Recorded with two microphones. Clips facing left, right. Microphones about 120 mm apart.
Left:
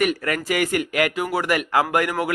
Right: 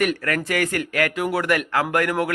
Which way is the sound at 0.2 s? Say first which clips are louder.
Even; 10° left (ahead or behind).